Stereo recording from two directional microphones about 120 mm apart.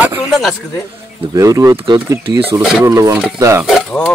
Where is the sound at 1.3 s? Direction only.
30° right (ahead or behind).